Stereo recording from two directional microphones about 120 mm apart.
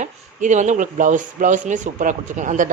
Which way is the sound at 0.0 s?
90° right.